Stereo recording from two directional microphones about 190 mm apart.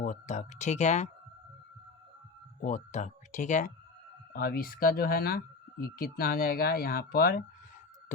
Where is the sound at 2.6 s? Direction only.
40° left (ahead or behind).